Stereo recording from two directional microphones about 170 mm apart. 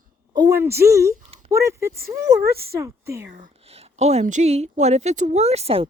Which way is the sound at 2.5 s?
65° right (ahead or behind).